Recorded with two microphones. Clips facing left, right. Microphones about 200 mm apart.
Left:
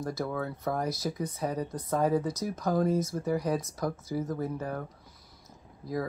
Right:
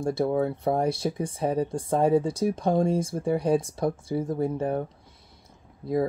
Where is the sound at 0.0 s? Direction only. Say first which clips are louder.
Right 8 dB; 30° right (ahead or behind).